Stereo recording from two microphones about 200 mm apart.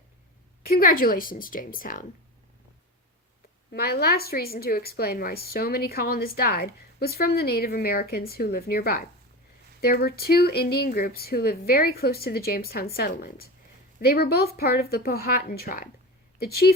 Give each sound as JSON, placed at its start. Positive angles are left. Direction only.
{"t": 0.6, "sound": "a woman's voice", "side_deg": 45}
{"t": 3.7, "sound": "a woman's voice", "side_deg": 50}